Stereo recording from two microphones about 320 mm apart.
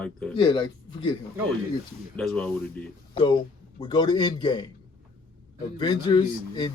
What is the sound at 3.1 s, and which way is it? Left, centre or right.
Speech, centre.